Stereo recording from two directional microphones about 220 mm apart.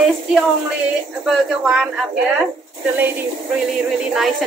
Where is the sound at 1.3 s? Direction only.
5° right (ahead or behind).